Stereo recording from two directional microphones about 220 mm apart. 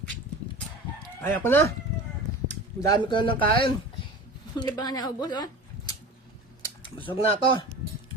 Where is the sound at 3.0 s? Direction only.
20° left (ahead or behind).